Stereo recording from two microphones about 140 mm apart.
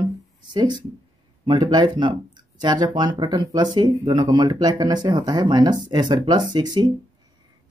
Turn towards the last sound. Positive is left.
turn(degrees=-30)  # may be behind; listen again after turning